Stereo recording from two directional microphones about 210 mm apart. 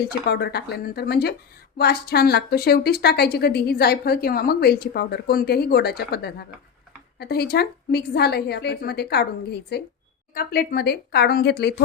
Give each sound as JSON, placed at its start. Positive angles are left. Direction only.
{"t": 0.3, "sound": "a woman's voice", "side_deg": 50}